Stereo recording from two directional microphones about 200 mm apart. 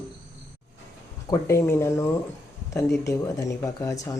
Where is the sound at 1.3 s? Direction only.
15° left (ahead or behind).